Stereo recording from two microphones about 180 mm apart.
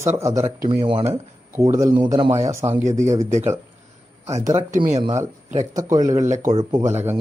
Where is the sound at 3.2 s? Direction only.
40° right (ahead or behind).